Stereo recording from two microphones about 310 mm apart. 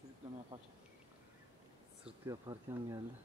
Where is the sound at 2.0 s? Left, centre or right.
Centre.